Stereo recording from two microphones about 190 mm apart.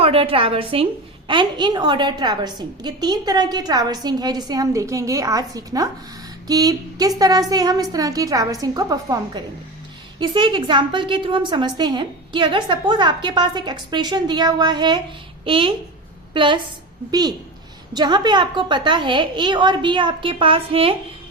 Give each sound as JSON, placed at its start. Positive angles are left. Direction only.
{"t": 0.0, "sound": "a woman's voice", "side_deg": -30}